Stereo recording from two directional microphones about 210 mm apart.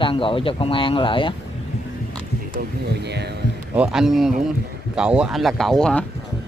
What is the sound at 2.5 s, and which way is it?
Speech, 55° right (ahead or behind).